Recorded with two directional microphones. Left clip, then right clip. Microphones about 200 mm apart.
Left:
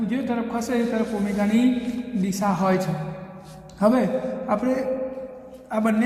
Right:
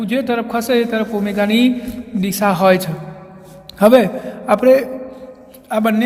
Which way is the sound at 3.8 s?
80° right.